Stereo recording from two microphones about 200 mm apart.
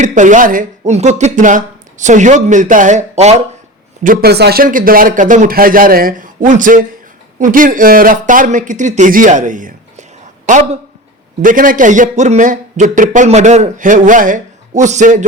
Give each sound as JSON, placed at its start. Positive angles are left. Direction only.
{"t": 0.0, "sound": "a man's voice", "side_deg": -40}
{"t": 4.0, "sound": "a man's voice", "side_deg": -45}